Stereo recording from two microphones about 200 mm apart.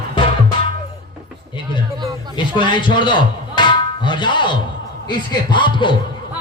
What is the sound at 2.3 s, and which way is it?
A man's voice, 25° left (ahead or behind).